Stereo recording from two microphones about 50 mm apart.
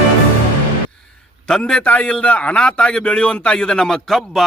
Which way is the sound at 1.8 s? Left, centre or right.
Left.